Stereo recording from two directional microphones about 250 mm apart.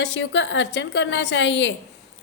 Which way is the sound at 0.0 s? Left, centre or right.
Left.